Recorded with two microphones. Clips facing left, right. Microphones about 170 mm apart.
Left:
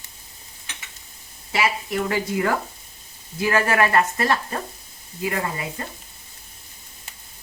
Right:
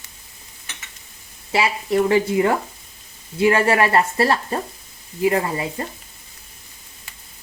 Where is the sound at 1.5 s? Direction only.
25° right (ahead or behind).